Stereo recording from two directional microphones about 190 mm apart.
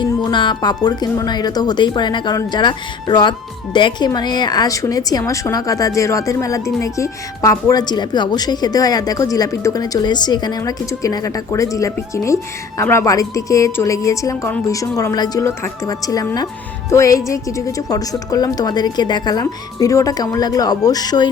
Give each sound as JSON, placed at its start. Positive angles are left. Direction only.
{"t": 0.0, "sound": "a woman's voice", "side_deg": 25}